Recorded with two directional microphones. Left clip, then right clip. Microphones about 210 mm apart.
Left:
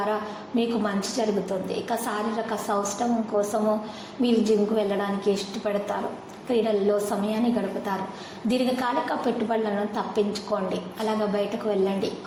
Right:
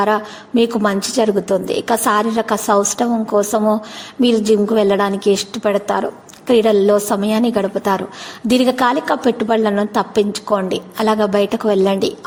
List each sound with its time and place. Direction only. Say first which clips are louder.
0.0 s a woman's voice: right 11 dB; 45° right (ahead or behind)